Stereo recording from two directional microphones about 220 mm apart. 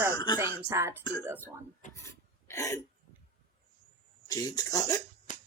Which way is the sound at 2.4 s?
15° left (ahead or behind).